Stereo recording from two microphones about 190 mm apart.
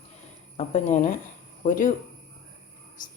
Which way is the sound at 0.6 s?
40° left (ahead or behind).